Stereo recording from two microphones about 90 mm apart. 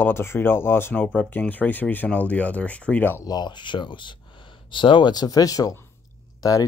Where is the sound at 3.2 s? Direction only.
50° left (ahead or behind).